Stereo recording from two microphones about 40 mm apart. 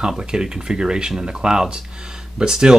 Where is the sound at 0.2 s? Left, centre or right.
Centre.